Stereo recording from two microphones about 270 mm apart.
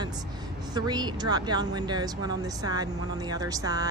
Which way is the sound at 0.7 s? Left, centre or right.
Centre.